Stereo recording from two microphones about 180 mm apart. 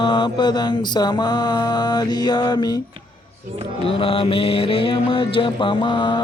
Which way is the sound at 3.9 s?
30° left (ahead or behind).